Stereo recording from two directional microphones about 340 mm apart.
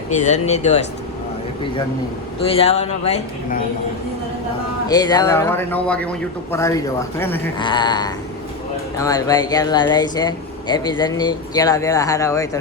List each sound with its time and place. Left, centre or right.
0.1 s speech: centre
2.6 s speech: centre
4.9 s speech: centre